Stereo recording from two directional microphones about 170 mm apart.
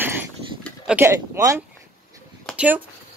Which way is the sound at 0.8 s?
15° right (ahead or behind).